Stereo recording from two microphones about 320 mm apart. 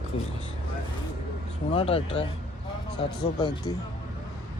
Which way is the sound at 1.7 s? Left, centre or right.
Centre.